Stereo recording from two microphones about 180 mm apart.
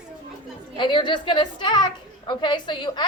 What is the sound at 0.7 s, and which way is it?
A woman's voice, 25° left (ahead or behind).